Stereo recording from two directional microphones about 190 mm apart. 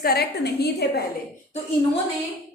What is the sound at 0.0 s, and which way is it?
A woman's voice, 55° left (ahead or behind).